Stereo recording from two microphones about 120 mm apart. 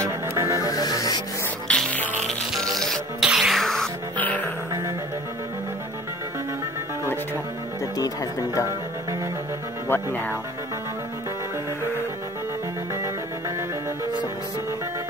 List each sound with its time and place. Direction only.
0.0 s music: 25° right (ahead or behind)
0.7 s music: 30° left (ahead or behind)
1.7 s music: 10° left (ahead or behind)
4.2 s music: 15° left (ahead or behind)
7.8 s music: 30° left (ahead or behind)
9.8 s speech: 15° left (ahead or behind)